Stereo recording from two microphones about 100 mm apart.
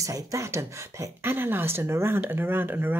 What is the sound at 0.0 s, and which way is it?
Speech, 35° right (ahead or behind).